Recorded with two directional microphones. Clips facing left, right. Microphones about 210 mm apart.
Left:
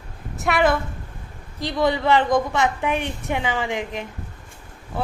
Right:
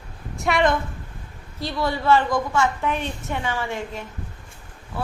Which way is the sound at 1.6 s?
15° left (ahead or behind).